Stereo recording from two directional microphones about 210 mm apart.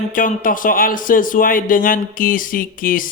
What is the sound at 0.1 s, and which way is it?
A man's voice, 40° left (ahead or behind).